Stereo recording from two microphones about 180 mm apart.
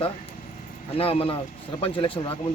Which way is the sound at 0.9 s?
30° left (ahead or behind).